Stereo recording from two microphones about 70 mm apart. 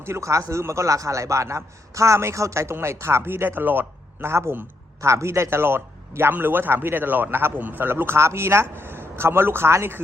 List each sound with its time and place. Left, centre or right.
0.0 s a man's voice: right